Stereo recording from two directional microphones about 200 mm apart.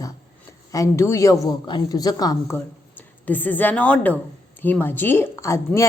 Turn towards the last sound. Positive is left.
turn(degrees=15)  # may be behind; listen again after turning